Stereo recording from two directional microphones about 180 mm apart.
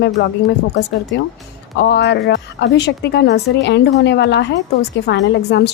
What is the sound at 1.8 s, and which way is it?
A woman's voice, 70° left (ahead or behind).